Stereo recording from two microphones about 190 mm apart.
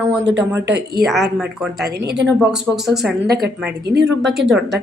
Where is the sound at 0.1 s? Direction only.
5° right (ahead or behind).